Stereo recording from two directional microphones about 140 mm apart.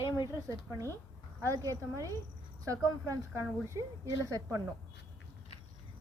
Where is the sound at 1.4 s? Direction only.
25° right (ahead or behind).